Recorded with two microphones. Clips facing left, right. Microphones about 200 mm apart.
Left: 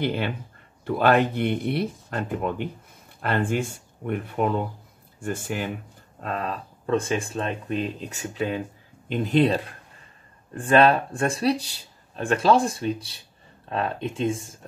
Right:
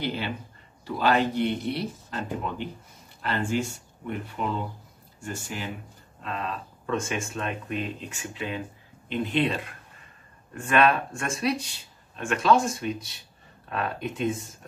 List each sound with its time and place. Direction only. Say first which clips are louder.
0.0 s speech: left 4 dB; 55° left (ahead or behind)
6.2 s speech: left 3 dB; 40° left (ahead or behind)